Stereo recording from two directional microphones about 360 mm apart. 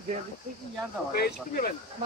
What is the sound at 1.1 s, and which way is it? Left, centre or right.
Speech, left.